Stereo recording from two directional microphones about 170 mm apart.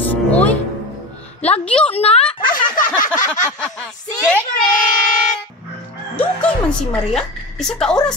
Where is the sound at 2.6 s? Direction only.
50° left (ahead or behind).